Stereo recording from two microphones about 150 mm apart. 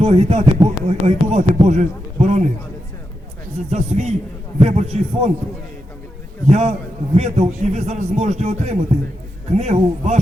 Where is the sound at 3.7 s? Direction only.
50° right (ahead or behind).